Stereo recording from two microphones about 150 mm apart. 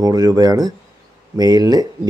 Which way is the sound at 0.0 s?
25° right (ahead or behind).